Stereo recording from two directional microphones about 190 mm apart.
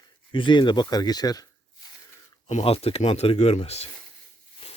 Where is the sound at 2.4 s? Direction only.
35° left (ahead or behind).